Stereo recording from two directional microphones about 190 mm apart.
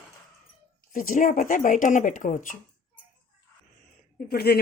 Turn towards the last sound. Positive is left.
turn(degrees=55)  # may be behind; listen again after turning